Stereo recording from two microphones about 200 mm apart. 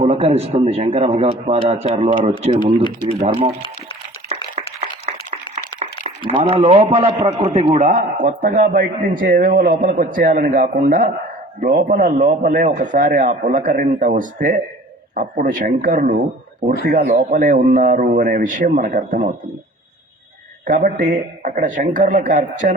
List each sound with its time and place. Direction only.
0.0 s a man's voice: 30° right (ahead or behind)
4.5 s a sound: 30° right (ahead or behind)
5.8 s a man's voice: 30° right (ahead or behind)
20.7 s a man's voice: 40° right (ahead or behind)